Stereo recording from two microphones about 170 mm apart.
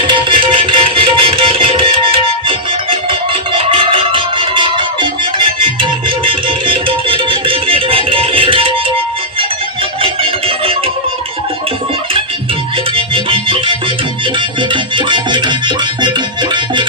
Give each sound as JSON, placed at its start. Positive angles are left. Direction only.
{"t": 0.1, "sound": "music", "side_deg": -30}
{"t": 13.1, "sound": "music", "side_deg": -30}